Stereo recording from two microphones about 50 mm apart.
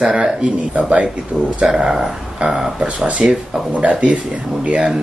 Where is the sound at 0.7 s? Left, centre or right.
Right.